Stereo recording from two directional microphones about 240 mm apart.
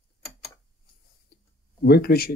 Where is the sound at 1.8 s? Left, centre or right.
Left.